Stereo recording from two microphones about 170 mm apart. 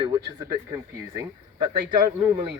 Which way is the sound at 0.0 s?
20° right (ahead or behind).